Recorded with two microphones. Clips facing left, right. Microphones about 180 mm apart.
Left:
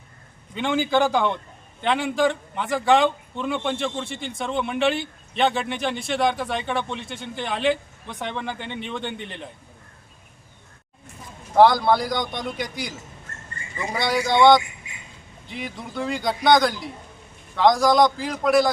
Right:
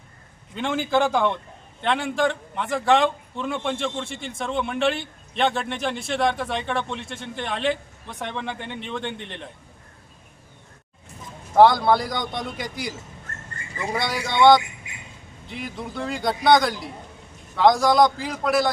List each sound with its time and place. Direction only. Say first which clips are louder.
0.5 s a man's voice: left 1 dB; centre (ahead or behind)
11.5 s a man's voice: even; centre (ahead or behind)